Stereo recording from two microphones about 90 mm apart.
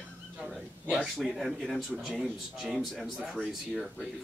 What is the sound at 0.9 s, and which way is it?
Speech, centre (ahead or behind).